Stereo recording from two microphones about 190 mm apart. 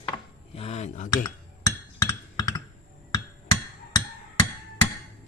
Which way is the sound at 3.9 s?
20° left (ahead or behind).